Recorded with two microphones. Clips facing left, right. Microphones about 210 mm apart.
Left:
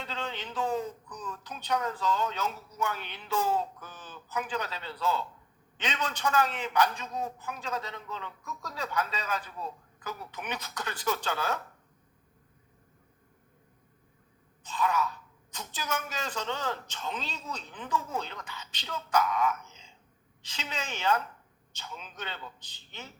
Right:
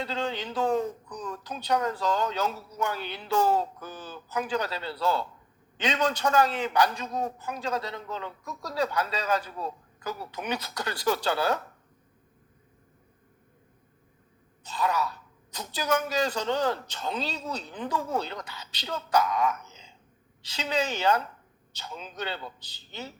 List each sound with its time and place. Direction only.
0.0 s a man's voice: 35° right (ahead or behind)
14.7 s a man's voice: 35° right (ahead or behind)
20.5 s a man's voice: 35° right (ahead or behind)